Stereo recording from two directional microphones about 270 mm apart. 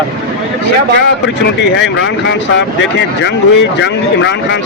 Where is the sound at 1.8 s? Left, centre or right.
Left.